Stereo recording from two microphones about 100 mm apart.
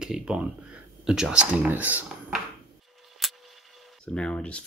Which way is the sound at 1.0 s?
5° right (ahead or behind).